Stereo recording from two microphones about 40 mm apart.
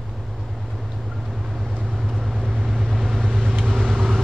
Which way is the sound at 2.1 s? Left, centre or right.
Centre.